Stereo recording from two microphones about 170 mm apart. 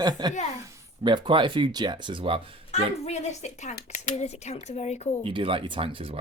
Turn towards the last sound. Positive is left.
turn(degrees=-30)  # may be behind; listen again after turning